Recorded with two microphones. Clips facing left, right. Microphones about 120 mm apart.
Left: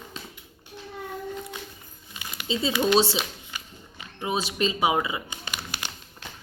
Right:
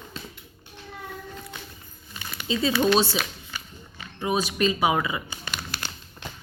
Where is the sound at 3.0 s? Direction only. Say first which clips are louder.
Left 1 dB; 25° left (ahead or behind).